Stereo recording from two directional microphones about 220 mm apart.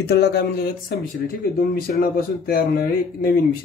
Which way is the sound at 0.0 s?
50° left (ahead or behind).